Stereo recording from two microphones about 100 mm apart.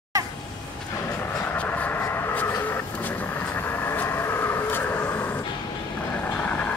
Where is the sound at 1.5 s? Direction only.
15° left (ahead or behind).